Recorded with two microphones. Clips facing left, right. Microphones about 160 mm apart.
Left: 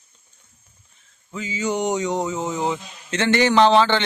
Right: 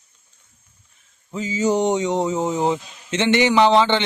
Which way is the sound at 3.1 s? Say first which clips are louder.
Right 1 dB; 20° right (ahead or behind).